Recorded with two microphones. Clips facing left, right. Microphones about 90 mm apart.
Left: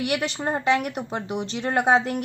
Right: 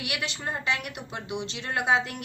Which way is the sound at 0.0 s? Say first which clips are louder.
Left 8 dB; 40° left (ahead or behind).